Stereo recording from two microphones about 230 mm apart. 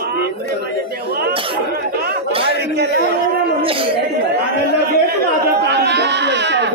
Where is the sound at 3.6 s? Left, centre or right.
Right.